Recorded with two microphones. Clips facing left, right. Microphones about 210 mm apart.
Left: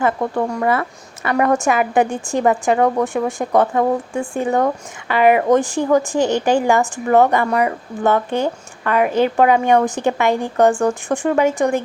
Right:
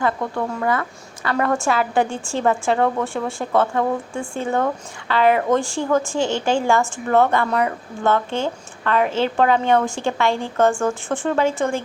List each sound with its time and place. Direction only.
0.0 s a woman's voice: 20° left (ahead or behind)